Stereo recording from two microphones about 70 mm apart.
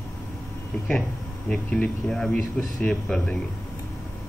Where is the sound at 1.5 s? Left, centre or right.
Centre.